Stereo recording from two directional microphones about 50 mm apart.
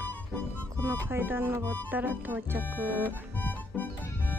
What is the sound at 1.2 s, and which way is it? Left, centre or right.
Speech, right.